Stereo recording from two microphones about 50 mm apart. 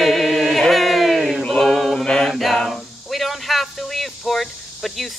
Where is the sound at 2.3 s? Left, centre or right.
Centre.